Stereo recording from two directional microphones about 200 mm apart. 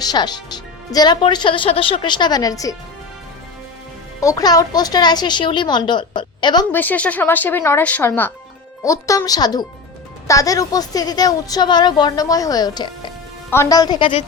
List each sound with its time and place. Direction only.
0.0 s speech: 20° left (ahead or behind)
4.2 s speech: 15° left (ahead or behind)
6.7 s speech: 10° left (ahead or behind); by 14.3 s 25° left (ahead or behind)